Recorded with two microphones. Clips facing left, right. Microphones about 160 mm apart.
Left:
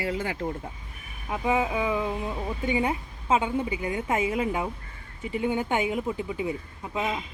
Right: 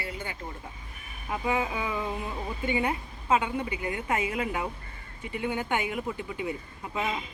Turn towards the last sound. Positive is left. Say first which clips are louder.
# left 2 dB
turn(degrees=15)  # may be behind; listen again after turning